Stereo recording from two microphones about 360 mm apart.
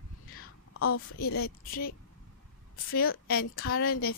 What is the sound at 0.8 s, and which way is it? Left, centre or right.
A woman's voice, left.